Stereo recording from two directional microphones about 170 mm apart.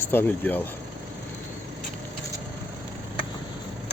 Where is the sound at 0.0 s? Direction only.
10° left (ahead or behind).